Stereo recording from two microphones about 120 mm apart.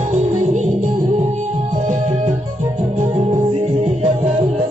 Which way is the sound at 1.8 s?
90° right.